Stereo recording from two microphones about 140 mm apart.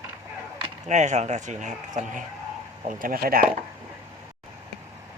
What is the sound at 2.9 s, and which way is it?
Speech, 80° right.